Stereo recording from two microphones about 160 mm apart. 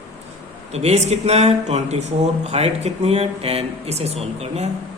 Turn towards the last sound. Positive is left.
turn(degrees=-40)  # may be behind; listen again after turning